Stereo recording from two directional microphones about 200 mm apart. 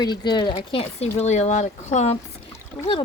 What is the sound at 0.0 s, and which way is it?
Speech, 20° left (ahead or behind).